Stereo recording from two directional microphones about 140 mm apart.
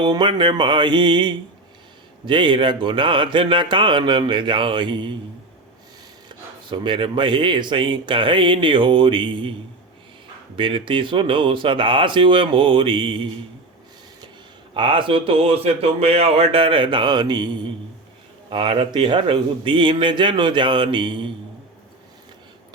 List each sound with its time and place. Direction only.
0.0 s speech: 35° right (ahead or behind)
6.2 s speech: 35° right (ahead or behind)
10.6 s speech: 35° right (ahead or behind)
14.7 s speech: 35° right (ahead or behind)